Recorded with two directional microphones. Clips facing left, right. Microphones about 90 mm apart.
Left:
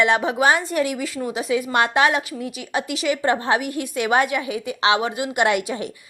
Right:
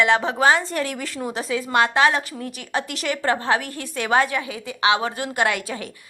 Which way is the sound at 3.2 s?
20° left (ahead or behind).